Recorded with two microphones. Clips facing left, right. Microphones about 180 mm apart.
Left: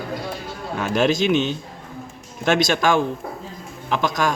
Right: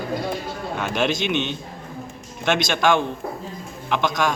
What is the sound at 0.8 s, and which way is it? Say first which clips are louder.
A man's voice: left 4 dB; 40° left (ahead or behind).